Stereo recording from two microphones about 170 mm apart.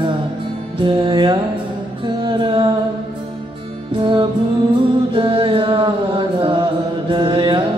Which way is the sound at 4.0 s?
30° right (ahead or behind).